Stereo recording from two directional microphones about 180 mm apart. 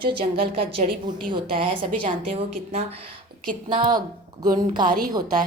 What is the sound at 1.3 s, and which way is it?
Speech, 30° right (ahead or behind).